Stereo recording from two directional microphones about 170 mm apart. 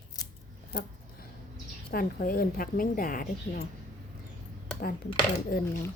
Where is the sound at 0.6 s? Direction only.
60° left (ahead or behind).